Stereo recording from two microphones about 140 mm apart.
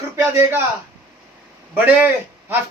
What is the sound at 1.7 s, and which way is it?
Speech, 10° right (ahead or behind).